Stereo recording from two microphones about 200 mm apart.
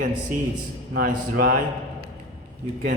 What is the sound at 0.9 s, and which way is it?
Speech, 50° right (ahead or behind).